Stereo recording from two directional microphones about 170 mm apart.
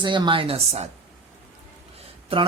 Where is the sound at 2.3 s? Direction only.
35° right (ahead or behind).